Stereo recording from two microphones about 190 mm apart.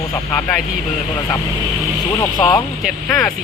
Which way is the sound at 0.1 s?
10° left (ahead or behind).